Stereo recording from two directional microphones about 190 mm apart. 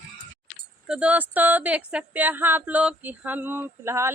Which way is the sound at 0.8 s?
5° right (ahead or behind).